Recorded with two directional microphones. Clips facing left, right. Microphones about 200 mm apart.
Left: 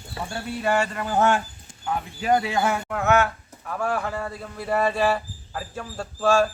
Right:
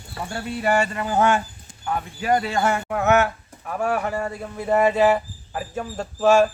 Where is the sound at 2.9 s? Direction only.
20° right (ahead or behind).